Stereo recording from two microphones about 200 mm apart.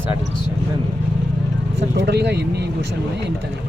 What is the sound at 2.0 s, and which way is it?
Speech, 60° right (ahead or behind).